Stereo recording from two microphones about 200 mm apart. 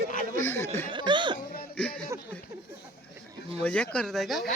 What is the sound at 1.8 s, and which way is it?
Speech, 5° left (ahead or behind).